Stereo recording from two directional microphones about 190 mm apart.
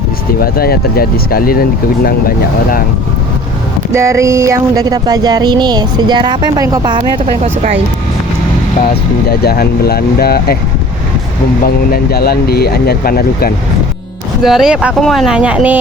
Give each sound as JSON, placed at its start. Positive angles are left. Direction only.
{"t": 0.3, "sound": "speech", "side_deg": 55}
{"t": 3.9, "sound": "speech", "side_deg": -15}
{"t": 9.4, "sound": "speech", "side_deg": 55}
{"t": 11.6, "sound": "speech", "side_deg": 50}
{"t": 14.4, "sound": "speech", "side_deg": 0}